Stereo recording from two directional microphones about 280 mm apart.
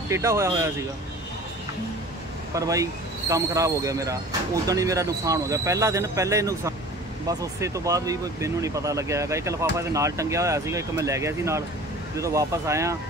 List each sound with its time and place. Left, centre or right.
0.1 s speech: centre
2.5 s speech: centre